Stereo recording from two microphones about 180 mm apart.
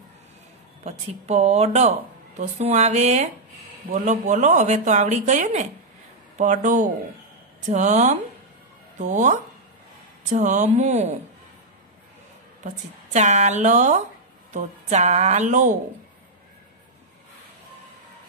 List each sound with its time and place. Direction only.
0.8 s a woman's voice: 35° right (ahead or behind)
13.1 s a woman's voice: 40° right (ahead or behind)